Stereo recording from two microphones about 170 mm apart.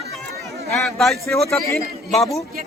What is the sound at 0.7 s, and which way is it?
Speech, 5° left (ahead or behind).